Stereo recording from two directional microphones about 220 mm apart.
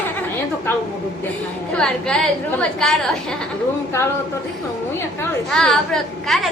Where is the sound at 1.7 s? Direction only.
5° left (ahead or behind).